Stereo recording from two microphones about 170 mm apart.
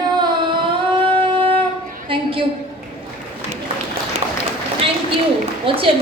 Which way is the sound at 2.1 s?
30° right (ahead or behind).